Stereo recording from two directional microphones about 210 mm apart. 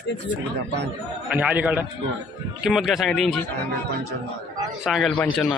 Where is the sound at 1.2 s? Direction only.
5° right (ahead or behind).